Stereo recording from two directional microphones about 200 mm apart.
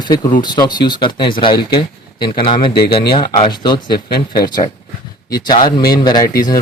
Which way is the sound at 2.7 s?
50° left (ahead or behind).